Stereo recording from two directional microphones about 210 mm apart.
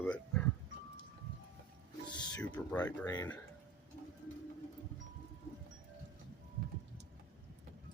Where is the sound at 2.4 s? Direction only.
5° left (ahead or behind).